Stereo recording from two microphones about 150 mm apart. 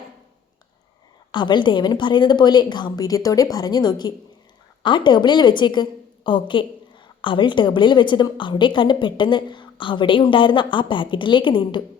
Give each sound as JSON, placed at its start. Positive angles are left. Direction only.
{"t": 1.3, "sound": "a woman's voice", "side_deg": 30}